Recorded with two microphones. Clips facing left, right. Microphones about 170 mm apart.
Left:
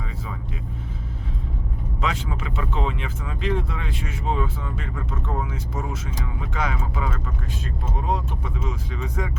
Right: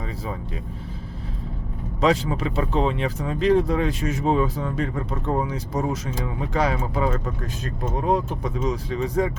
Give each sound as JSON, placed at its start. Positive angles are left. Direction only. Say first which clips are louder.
{"t": 2.0, "sound": "speech", "louder": "right 8 dB", "side_deg": -35}